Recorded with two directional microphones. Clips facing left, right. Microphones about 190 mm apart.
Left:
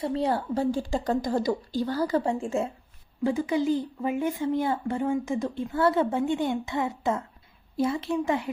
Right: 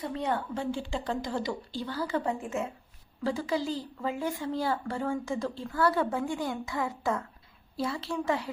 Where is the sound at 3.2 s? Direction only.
20° left (ahead or behind).